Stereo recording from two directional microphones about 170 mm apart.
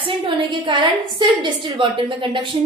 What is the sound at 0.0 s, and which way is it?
A woman's voice, 30° right (ahead or behind).